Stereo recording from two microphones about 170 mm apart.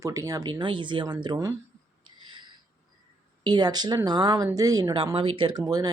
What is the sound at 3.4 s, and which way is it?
Speech, 25° right (ahead or behind).